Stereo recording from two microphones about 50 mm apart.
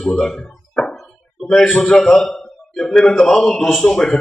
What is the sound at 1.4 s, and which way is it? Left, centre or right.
A man's voice, centre.